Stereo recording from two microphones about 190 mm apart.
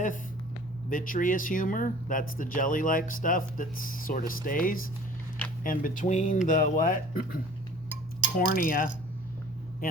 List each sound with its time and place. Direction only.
0.9 s speech: 45° left (ahead or behind)
8.4 s speech: 45° left (ahead or behind)